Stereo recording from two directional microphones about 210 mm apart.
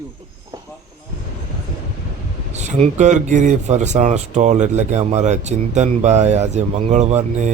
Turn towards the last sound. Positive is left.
turn(degrees=-35)  # may be behind; listen again after turning